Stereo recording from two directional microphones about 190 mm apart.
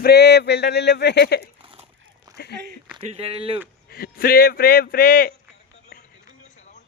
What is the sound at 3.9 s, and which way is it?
Speech, 50° left (ahead or behind).